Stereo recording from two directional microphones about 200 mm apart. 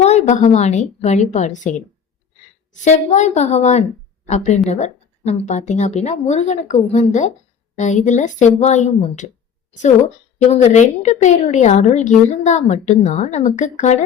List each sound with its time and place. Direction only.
0.0 s a woman's voice: 35° left (ahead or behind)
2.7 s a woman's voice: 35° left (ahead or behind)
10.5 s a woman's voice: 35° left (ahead or behind)